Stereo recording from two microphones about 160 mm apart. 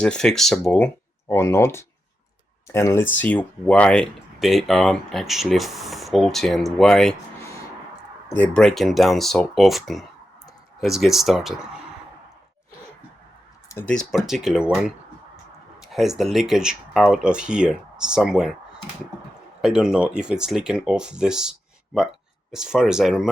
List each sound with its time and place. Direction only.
0.0 s speech: 5° left (ahead or behind)
1.3 s speech: 15° left (ahead or behind)
8.3 s speech: 10° left (ahead or behind)
13.7 s speech: 10° left (ahead or behind)
19.6 s speech: 5° right (ahead or behind)
22.5 s speech: 5° right (ahead or behind)